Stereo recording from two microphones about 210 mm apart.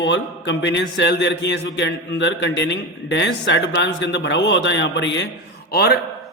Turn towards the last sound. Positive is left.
turn(degrees=50)  # may be behind; listen again after turning